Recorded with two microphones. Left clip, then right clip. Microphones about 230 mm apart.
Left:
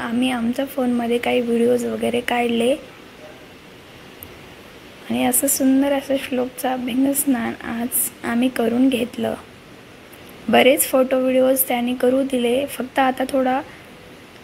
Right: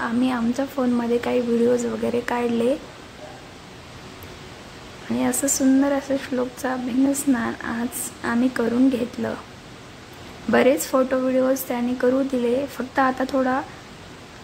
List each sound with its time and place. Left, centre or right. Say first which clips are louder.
0.0 s a woman's voice: left 1 dB; centre
5.2 s speech: left 2 dB; centre
10.5 s speech: left 4 dB; centre